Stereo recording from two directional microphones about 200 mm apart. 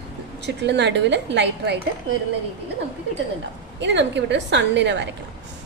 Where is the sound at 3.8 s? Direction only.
60° right (ahead or behind).